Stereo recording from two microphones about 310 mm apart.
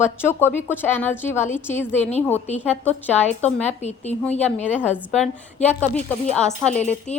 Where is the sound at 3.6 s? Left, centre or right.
Left.